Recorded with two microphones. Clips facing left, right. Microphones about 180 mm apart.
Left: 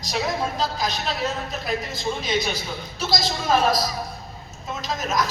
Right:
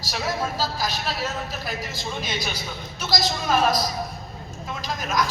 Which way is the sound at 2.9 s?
25° left (ahead or behind).